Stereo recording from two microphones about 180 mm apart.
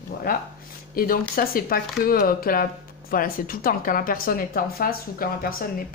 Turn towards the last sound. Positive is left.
turn(degrees=55)  # may be behind; listen again after turning